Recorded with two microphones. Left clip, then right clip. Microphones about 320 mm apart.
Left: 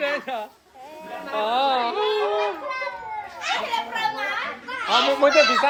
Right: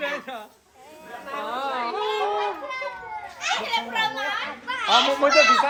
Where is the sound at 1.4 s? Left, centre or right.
Centre.